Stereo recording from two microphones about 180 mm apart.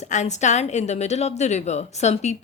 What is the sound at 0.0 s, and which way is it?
A woman's voice, 40° left (ahead or behind).